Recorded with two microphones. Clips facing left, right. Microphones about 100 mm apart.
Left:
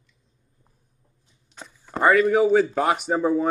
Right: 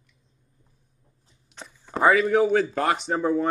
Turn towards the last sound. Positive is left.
turn(degrees=5)  # may be behind; listen again after turning